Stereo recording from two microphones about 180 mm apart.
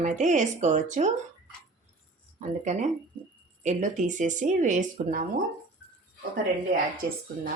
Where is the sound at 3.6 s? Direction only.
40° right (ahead or behind).